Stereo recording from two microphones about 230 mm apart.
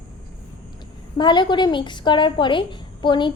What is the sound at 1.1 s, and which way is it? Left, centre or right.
A woman's voice, centre.